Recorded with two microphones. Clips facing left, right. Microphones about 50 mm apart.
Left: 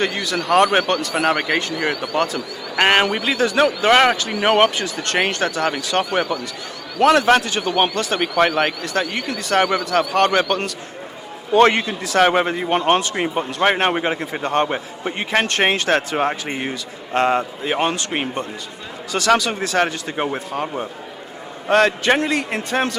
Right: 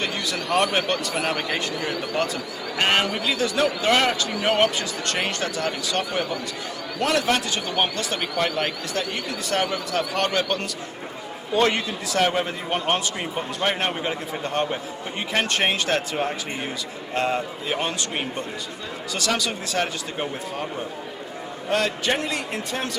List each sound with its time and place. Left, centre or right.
0.3 s speech: left
2.7 s a man's voice: left
10.1 s a man's voice: left
19.1 s a man's voice: left
20.1 s speech: left
21.7 s speech: left